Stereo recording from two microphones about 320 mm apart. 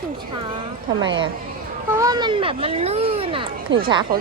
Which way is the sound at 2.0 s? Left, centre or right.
Centre.